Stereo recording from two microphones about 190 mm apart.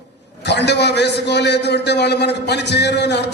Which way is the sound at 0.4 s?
65° left (ahead or behind).